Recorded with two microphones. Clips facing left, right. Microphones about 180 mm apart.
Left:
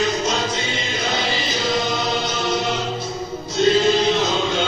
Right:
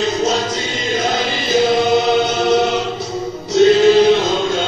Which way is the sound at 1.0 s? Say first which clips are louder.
Right 4 dB; 50° right (ahead or behind).